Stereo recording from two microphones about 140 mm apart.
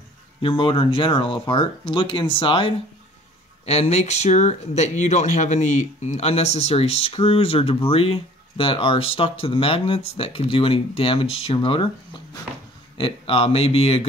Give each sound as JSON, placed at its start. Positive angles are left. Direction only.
{"t": 0.4, "sound": "speech", "side_deg": 40}
{"t": 3.6, "sound": "speech", "side_deg": 50}
{"t": 12.9, "sound": "speech", "side_deg": 40}